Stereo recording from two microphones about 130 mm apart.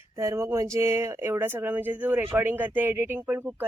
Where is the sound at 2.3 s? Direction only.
15° right (ahead or behind).